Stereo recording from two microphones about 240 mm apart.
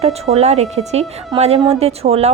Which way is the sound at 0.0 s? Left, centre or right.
Right.